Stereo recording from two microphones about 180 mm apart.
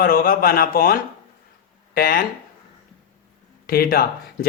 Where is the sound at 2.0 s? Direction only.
55° left (ahead or behind).